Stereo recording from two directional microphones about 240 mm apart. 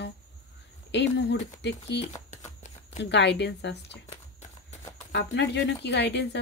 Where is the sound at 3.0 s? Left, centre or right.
Left.